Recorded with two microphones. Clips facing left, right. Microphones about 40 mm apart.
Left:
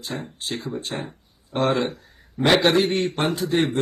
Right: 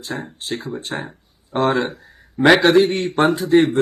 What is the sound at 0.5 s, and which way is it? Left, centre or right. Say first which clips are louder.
Speech: right 3 dB; centre.